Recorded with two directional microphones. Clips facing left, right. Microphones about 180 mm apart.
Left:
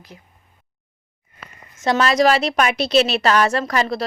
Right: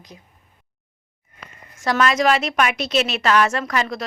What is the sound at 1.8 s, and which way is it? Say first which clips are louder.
A woman's voice: left 2 dB; 25° left (ahead or behind).